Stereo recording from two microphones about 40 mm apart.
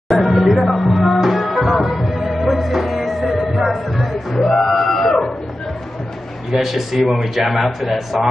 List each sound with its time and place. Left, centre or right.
0.1 s music: centre
4.6 s a sound: centre
5.0 s chicken: centre
6.5 s a man's voice: centre